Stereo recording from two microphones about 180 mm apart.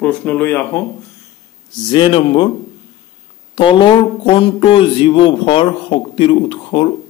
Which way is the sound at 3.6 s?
25° left (ahead or behind).